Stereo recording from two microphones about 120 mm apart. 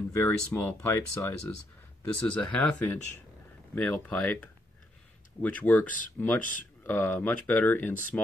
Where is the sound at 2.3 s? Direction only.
5° left (ahead or behind).